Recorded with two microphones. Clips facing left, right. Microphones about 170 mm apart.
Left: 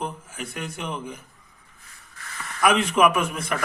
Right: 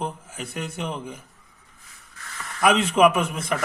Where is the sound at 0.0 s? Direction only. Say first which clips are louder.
Right 1 dB; 30° right (ahead or behind).